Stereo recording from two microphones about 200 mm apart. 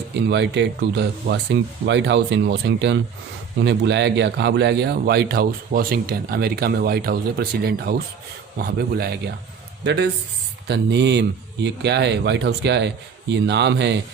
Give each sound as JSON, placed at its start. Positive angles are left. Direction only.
{"t": 0.2, "sound": "a man's voice", "side_deg": -60}